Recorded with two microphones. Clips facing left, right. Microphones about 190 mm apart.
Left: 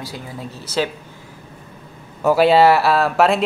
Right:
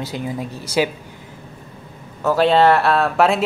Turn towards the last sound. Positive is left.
turn(degrees=0)  # may be behind; listen again after turning